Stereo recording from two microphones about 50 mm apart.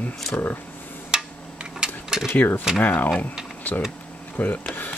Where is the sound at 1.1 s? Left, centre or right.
Centre.